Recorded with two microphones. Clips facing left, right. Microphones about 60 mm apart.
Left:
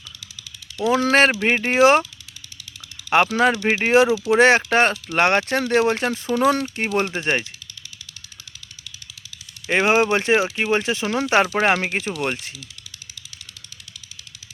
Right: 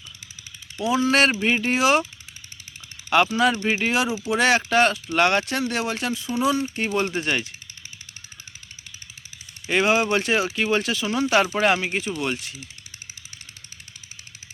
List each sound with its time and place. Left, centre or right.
0.8 s speech: left
1.4 s speech: left
3.2 s speech: left
6.7 s speech: left
9.6 s speech: left
11.0 s speech: left